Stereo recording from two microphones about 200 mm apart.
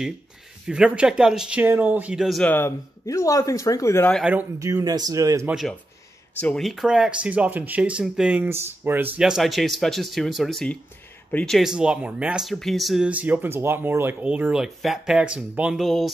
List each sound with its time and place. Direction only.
0.7 s speech: 5° right (ahead or behind); by 4.2 s 10° left (ahead or behind)
4.2 s speech: 10° right (ahead or behind)
5.5 s speech: centre (ahead or behind)